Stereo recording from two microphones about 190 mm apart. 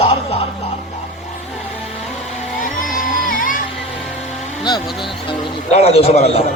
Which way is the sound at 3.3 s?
45° left (ahead or behind).